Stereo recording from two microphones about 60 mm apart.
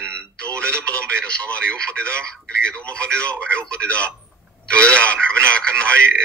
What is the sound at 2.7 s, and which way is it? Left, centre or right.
A man's voice, centre.